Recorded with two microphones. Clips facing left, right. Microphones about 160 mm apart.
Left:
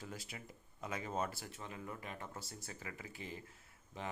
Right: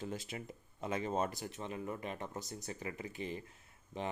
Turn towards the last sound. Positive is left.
turn(degrees=-20)  # may be behind; listen again after turning